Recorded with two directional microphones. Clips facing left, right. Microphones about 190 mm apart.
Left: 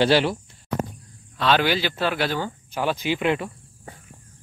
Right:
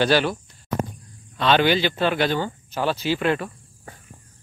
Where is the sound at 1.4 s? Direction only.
5° left (ahead or behind).